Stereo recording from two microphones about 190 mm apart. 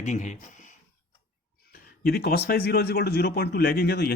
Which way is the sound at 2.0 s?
55° left (ahead or behind).